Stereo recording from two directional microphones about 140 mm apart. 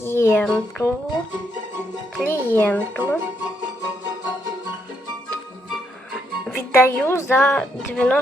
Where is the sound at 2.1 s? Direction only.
10° left (ahead or behind).